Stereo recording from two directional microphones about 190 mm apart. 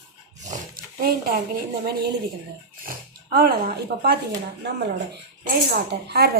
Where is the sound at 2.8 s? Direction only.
50° right (ahead or behind).